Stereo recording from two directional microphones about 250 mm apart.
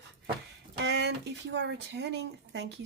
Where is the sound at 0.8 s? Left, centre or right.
Right.